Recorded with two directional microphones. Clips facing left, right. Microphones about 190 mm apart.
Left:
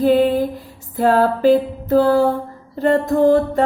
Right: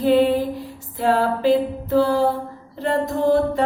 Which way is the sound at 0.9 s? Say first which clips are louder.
Left 4 dB; 45° left (ahead or behind).